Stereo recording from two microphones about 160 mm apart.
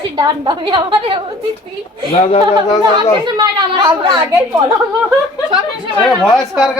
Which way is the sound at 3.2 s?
25° right (ahead or behind).